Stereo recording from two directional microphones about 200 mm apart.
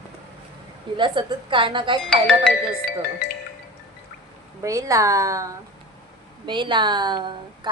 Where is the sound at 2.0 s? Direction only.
5° left (ahead or behind).